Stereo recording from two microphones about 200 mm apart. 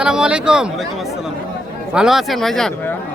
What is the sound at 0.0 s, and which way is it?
Speech, 5° right (ahead or behind).